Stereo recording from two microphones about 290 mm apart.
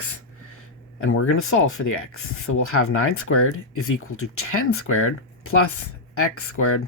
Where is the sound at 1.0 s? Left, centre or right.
Left.